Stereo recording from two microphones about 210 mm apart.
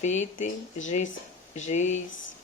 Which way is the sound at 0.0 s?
35° left (ahead or behind).